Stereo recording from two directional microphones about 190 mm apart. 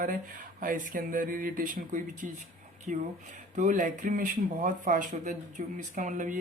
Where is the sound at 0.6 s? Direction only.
45° right (ahead or behind).